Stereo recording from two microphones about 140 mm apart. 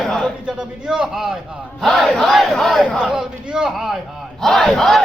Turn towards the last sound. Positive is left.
turn(degrees=0)  # may be behind; listen again after turning